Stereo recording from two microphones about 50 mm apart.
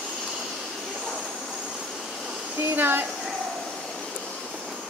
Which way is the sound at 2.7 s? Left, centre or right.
Right.